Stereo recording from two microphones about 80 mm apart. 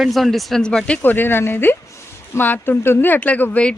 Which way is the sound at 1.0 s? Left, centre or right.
Left.